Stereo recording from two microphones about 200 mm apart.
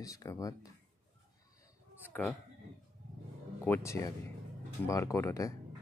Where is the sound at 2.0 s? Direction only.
10° left (ahead or behind).